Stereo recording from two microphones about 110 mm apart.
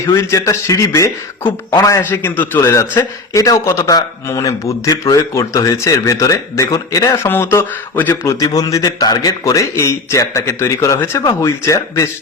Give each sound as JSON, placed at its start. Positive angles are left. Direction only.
{"t": 0.0, "sound": "a man's voice", "side_deg": 25}
{"t": 2.0, "sound": "a man's voice", "side_deg": 15}
{"t": 8.2, "sound": "a man's voice", "side_deg": 30}